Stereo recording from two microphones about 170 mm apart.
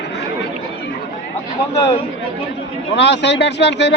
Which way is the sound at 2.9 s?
90° left.